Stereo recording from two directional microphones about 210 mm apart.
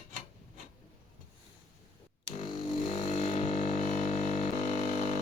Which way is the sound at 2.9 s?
30° left (ahead or behind).